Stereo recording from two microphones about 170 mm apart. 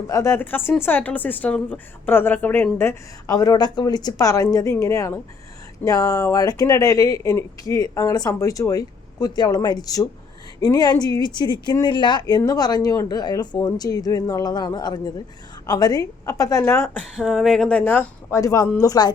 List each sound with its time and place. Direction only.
0.1 s speech: 15° left (ahead or behind)
17.2 s speech: centre (ahead or behind); by 19.1 s 20° left (ahead or behind)